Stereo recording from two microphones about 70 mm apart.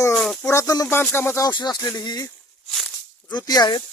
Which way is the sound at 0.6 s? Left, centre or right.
Left.